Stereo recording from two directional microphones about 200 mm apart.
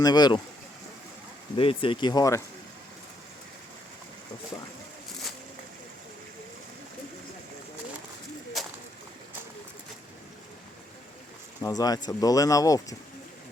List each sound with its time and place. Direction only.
0.0 s speech: 20° left (ahead or behind)
1.5 s speech: 25° left (ahead or behind)
11.6 s speech: 20° left (ahead or behind)